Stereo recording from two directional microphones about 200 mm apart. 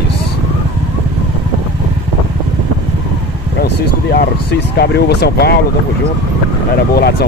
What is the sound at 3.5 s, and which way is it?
Speech, 50° left (ahead or behind).